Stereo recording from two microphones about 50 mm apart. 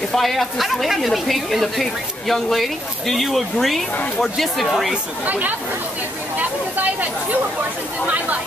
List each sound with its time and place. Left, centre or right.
0.1 s a woman's voice: centre
5.2 s speech: right